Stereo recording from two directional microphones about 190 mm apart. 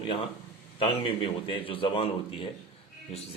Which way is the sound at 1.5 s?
25° left (ahead or behind).